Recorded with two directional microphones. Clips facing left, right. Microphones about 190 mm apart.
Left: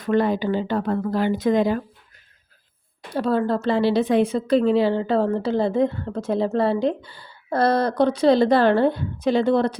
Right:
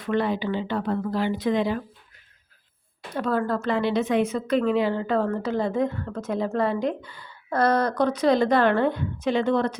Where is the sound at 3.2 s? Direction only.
30° left (ahead or behind).